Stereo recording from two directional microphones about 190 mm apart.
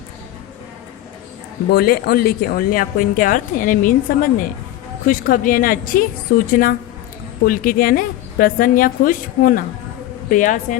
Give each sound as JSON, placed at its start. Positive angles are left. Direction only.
{"t": 1.7, "sound": "speech", "side_deg": 55}